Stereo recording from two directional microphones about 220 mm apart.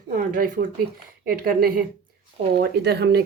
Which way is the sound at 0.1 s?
40° right (ahead or behind).